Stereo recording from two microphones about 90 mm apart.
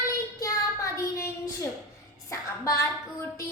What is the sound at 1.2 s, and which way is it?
Child singing, 35° left (ahead or behind).